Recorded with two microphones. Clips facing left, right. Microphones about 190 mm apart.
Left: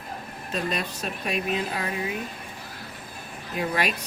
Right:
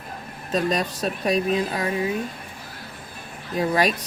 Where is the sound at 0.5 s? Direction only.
40° right (ahead or behind).